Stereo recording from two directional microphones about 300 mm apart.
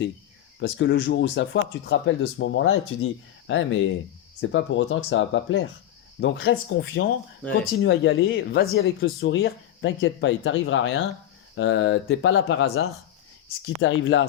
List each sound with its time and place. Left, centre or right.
0.6 s speech: left